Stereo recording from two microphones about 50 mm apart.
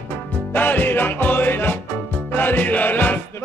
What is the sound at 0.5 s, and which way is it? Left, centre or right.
Music, left.